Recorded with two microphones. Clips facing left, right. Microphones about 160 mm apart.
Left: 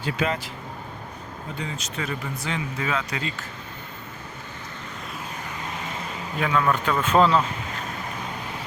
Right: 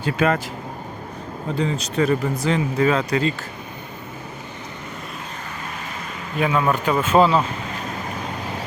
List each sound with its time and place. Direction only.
0.0 s speech: 50° right (ahead or behind)
1.5 s speech: 35° right (ahead or behind)
6.4 s speech: 20° right (ahead or behind)